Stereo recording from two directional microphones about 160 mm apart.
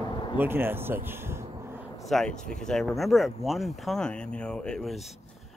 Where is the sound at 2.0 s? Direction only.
Centre (ahead or behind).